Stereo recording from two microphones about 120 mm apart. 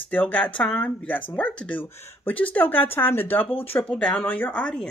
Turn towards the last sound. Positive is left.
turn(degrees=10)  # may be behind; listen again after turning